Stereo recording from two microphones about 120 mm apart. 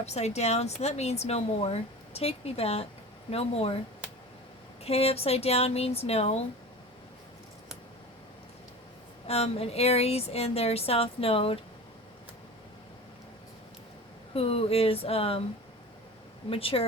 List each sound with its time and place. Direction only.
0.0 s speech: 65° left (ahead or behind)
4.8 s speech: 55° left (ahead or behind)
9.2 s speech: 60° left (ahead or behind)
14.3 s speech: 55° left (ahead or behind)
16.5 s speech: 50° left (ahead or behind)